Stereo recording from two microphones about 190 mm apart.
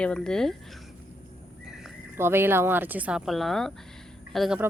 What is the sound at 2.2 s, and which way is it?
Speech, 10° right (ahead or behind).